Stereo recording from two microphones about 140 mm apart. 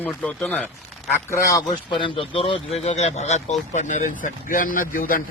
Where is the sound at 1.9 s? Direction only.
35° left (ahead or behind).